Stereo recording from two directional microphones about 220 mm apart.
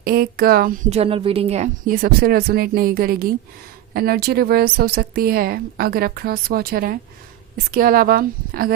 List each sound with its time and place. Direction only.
0.0 s a woman's voice: 45° right (ahead or behind)
0.9 s a woman's voice: 25° right (ahead or behind)